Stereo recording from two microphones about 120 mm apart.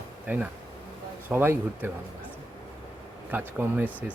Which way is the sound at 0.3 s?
15° right (ahead or behind).